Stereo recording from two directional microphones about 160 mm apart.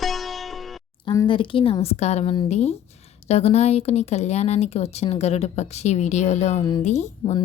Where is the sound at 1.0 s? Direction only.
30° left (ahead or behind).